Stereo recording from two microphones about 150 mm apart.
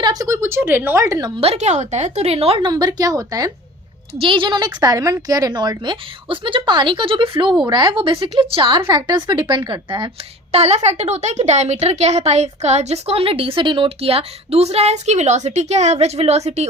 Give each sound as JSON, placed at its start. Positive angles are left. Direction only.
{"t": 0.0, "sound": "a woman's voice", "side_deg": -25}
{"t": 1.4, "sound": "a woman's voice", "side_deg": -45}
{"t": 10.5, "sound": "a woman's voice", "side_deg": -45}